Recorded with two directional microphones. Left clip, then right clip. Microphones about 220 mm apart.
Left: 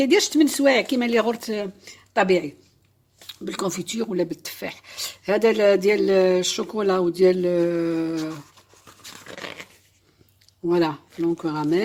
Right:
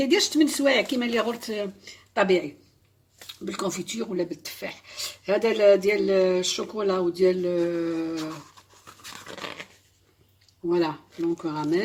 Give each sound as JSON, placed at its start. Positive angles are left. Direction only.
{"t": 0.0, "sound": "speech", "side_deg": 45}
{"t": 9.1, "sound": "dog", "side_deg": 25}
{"t": 10.7, "sound": "speech", "side_deg": 45}